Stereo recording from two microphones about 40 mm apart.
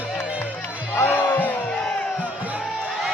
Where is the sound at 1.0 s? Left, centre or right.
Left.